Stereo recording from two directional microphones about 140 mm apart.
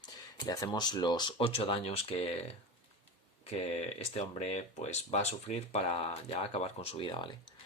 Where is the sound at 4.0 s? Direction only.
50° left (ahead or behind).